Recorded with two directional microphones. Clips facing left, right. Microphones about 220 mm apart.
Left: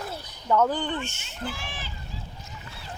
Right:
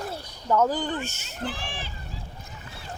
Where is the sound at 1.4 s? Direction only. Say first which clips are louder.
Right 2 dB; 35° right (ahead or behind).